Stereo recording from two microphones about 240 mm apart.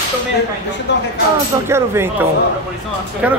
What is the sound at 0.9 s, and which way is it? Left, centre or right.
Speech, left.